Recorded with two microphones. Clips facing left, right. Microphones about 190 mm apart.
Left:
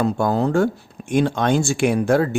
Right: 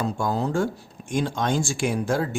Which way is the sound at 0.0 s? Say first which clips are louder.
Left 6 dB; 65° left (ahead or behind).